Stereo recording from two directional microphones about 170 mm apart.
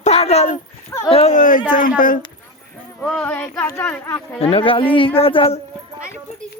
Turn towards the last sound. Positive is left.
turn(degrees=35)  # may be behind; listen again after turning